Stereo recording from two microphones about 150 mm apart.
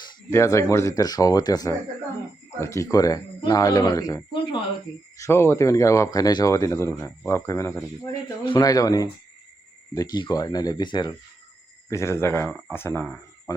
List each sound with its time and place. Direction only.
0.3 s speech: 20° left (ahead or behind)
5.1 s speech: 20° left (ahead or behind)
11.9 s speech: 20° left (ahead or behind)